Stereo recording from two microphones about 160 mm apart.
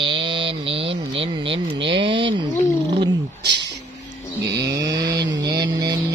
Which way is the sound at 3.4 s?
90° right.